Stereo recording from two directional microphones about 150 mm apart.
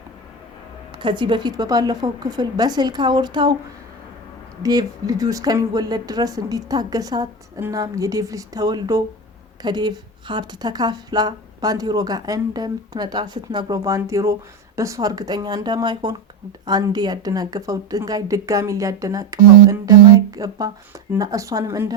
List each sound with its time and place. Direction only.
0.9 s speech: 30° right (ahead or behind)
4.6 s speech: 25° right (ahead or behind)